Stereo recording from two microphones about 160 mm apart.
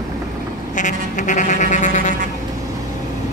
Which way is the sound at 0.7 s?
50° left (ahead or behind).